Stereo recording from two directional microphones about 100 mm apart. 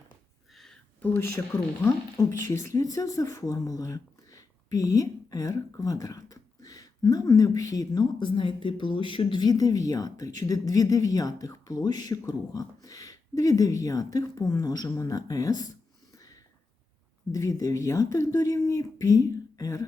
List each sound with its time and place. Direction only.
0.5 s a sound: 5° left (ahead or behind)
2.1 s speech: 30° left (ahead or behind)
17.3 s speech: 35° left (ahead or behind)